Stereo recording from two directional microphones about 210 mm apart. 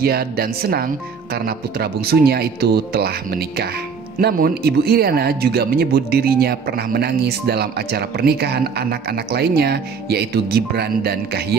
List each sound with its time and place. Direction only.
0.0 s speech: 45° right (ahead or behind)